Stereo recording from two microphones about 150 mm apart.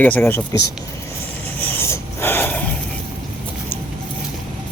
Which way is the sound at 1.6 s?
15° left (ahead or behind).